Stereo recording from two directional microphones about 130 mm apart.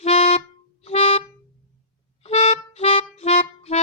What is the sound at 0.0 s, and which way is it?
Music, 55° left (ahead or behind).